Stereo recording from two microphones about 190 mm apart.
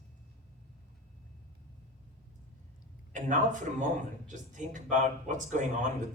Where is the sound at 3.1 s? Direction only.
40° right (ahead or behind).